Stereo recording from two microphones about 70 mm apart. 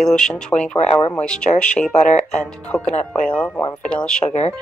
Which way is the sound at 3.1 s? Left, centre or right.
Left.